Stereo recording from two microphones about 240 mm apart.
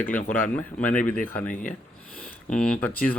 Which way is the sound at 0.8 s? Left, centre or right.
Left.